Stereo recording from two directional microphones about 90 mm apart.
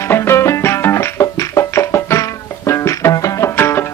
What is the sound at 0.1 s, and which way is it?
Music, 30° left (ahead or behind).